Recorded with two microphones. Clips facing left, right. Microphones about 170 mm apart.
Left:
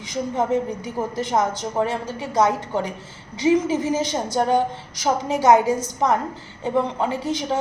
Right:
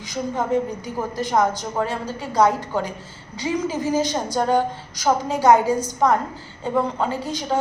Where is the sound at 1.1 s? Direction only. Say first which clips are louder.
Right 3 dB; 25° left (ahead or behind).